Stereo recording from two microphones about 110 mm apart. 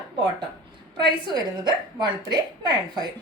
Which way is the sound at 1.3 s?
40° right (ahead or behind).